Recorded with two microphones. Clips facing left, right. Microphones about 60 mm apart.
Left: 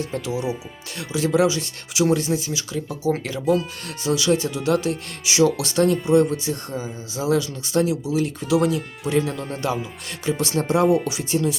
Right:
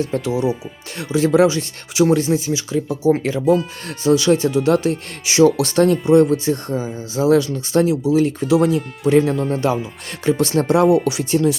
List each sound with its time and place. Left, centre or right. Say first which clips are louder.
0.1 s speech: right 6 dB; right
2.2 s speech: right 5 dB; right
3.8 s speech: right 7 dB; right
10.2 s speech: right 6 dB; right